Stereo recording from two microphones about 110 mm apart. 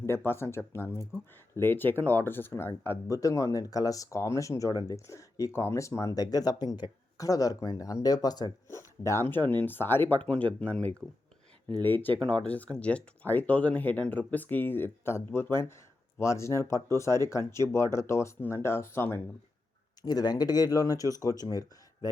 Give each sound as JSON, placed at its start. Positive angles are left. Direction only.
{"t": 0.0, "sound": "speech", "side_deg": 20}
{"t": 8.7, "sound": "speech", "side_deg": 25}
{"t": 20.0, "sound": "speech", "side_deg": 35}